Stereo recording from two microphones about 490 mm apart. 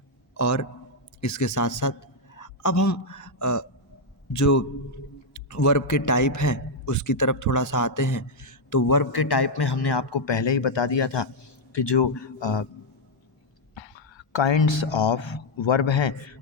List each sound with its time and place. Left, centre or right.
0.3 s a man's voice: left
13.7 s speech: left